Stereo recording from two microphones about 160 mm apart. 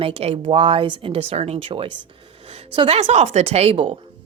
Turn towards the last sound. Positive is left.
turn(degrees=-35)  # may be behind; listen again after turning